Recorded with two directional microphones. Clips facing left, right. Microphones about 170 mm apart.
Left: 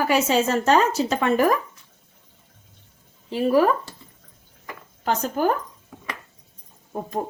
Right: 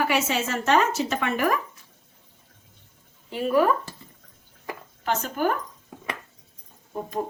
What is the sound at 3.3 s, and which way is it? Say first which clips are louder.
Speech: left 4 dB; 30° left (ahead or behind).